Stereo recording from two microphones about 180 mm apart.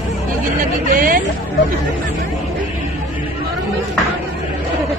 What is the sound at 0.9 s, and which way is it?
Hubbub, 50° right (ahead or behind).